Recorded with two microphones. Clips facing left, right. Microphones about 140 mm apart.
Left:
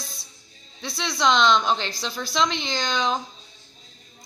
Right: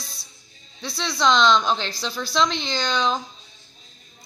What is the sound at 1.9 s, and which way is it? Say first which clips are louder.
Speech: right 2 dB; 25° left (ahead or behind).